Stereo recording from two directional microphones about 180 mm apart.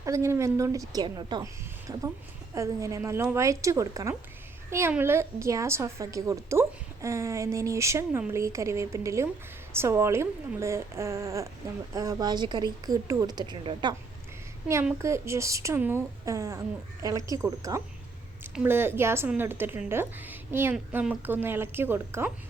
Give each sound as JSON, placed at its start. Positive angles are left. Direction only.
{"t": 0.0, "sound": "a woman's voice", "side_deg": -15}
{"t": 14.9, "sound": "a woman's voice", "side_deg": -15}